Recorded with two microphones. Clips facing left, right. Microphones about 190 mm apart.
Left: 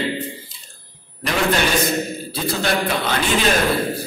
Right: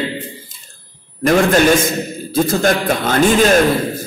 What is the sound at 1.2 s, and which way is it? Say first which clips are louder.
A man's voice: right 8 dB; 45° right (ahead or behind).